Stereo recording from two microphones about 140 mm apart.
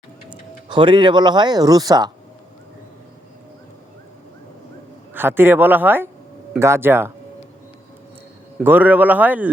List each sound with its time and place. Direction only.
0.3 s speech: 35° right (ahead or behind)
5.1 s speech: 15° right (ahead or behind)
8.6 s speech: 15° right (ahead or behind)